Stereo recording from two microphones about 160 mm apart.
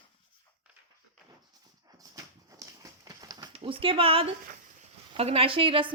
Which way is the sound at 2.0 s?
20° right (ahead or behind).